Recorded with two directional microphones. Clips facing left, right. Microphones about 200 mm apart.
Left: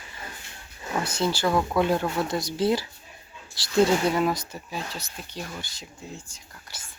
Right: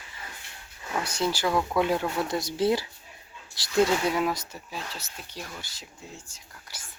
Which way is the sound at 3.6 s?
20° right (ahead or behind).